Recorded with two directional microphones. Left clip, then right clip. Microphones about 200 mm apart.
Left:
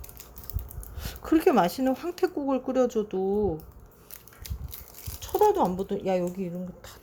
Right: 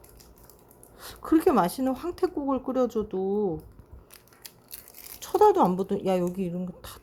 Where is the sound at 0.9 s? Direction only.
Centre (ahead or behind).